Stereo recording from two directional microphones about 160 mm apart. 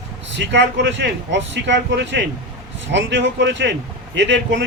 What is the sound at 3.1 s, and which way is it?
Speech, 90° right.